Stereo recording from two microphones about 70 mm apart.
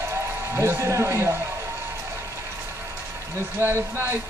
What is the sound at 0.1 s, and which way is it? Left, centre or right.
A man's voice, right.